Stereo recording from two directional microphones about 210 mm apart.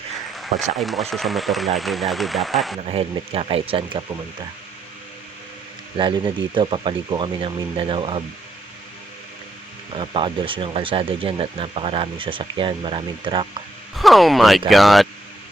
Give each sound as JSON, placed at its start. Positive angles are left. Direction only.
{"t": 0.8, "sound": "speech", "side_deg": 0}
{"t": 2.9, "sound": "speech", "side_deg": -25}
{"t": 6.0, "sound": "speech", "side_deg": -25}
{"t": 9.9, "sound": "speech", "side_deg": -25}
{"t": 13.9, "sound": "speech", "side_deg": 0}